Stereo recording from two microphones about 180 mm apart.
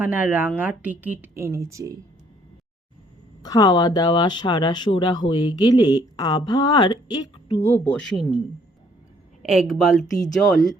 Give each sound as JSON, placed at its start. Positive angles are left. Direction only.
{"t": 0.0, "sound": "speech", "side_deg": -10}
{"t": 3.4, "sound": "speech", "side_deg": 20}
{"t": 8.1, "sound": "a woman's voice", "side_deg": 0}
{"t": 9.4, "sound": "a woman's voice", "side_deg": -5}